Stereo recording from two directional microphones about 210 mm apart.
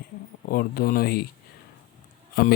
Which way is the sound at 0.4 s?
45° left (ahead or behind).